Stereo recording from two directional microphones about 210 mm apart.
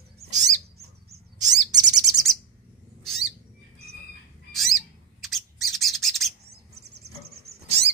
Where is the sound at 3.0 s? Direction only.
Centre (ahead or behind).